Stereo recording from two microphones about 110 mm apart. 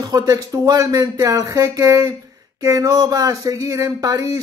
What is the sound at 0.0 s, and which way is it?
Speech, 35° right (ahead or behind).